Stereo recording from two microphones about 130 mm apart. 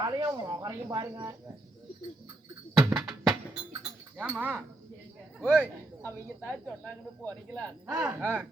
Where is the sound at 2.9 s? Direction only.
Centre (ahead or behind).